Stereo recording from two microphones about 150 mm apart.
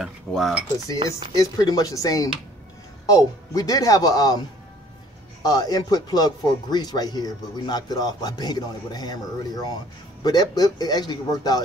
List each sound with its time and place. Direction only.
0.0 s speech: centre (ahead or behind)
1.0 s speech: 25° left (ahead or behind)